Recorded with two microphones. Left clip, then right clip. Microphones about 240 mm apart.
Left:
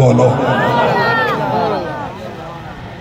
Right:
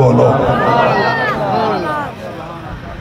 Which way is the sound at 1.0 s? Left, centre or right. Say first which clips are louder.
Left 1 dB; left.